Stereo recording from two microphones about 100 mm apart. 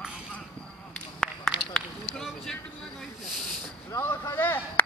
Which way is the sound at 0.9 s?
5° left (ahead or behind).